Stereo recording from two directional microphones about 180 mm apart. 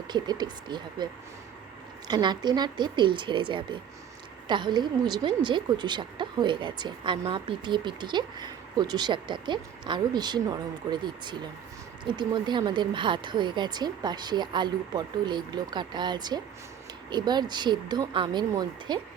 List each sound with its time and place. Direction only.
0.1 s speech: 25° right (ahead or behind)
2.0 s speech: 25° right (ahead or behind)